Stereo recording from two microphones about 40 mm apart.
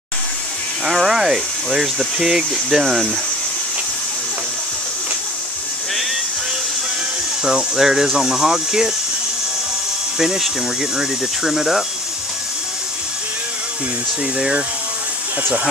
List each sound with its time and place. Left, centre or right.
0.8 s speech: centre
7.4 s speech: centre
10.1 s speech: centre